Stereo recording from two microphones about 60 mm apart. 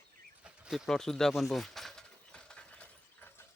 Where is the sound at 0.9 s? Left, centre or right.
Centre.